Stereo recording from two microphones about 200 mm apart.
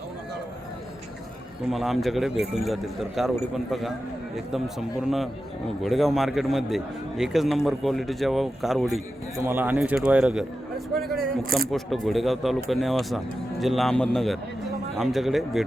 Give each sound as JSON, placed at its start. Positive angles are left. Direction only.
{"t": 1.7, "sound": "a man's voice", "side_deg": 0}
{"t": 11.7, "sound": "a man's voice", "side_deg": 0}